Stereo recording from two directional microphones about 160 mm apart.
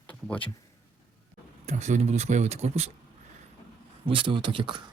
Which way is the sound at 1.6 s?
45° right (ahead or behind).